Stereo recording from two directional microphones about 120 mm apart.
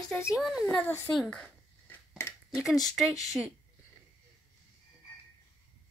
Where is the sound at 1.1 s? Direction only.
5° left (ahead or behind).